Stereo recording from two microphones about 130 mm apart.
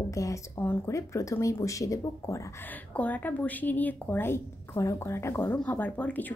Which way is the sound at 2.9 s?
10° left (ahead or behind).